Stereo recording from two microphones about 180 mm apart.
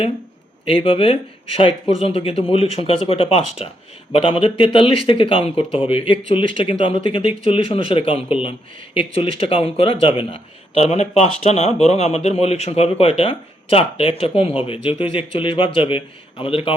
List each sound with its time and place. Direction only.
0.6 s speech: 30° left (ahead or behind)